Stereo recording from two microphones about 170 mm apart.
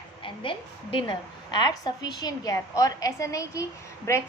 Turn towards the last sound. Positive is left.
turn(degrees=15)  # may be behind; listen again after turning